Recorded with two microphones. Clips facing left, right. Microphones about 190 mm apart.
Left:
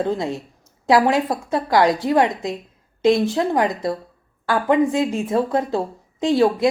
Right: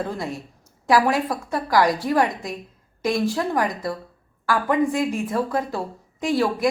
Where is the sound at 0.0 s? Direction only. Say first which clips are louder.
Left 6 dB; 25° left (ahead or behind).